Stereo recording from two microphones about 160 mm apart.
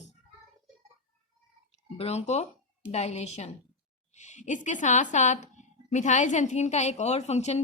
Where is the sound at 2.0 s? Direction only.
40° left (ahead or behind).